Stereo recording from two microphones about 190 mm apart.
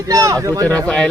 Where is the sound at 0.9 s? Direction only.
5° left (ahead or behind).